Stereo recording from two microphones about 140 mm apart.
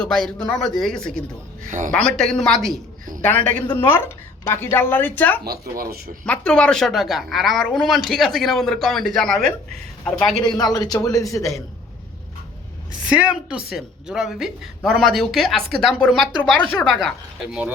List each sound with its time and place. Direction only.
0.0 s speech: 5° left (ahead or behind)
5.7 s speech: 90° right
6.2 s speech: 10° left (ahead or behind)
10.4 s a man's voice: 30° left (ahead or behind)
13.1 s speech: 10° right (ahead or behind)